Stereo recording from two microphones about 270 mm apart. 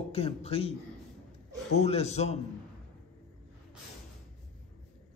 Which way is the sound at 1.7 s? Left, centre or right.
Left.